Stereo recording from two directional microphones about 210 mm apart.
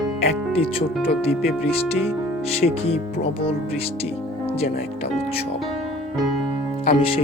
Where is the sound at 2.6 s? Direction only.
40° left (ahead or behind).